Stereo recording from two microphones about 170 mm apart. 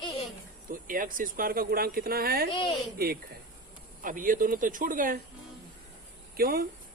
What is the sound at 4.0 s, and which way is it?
Speech, 50° right (ahead or behind).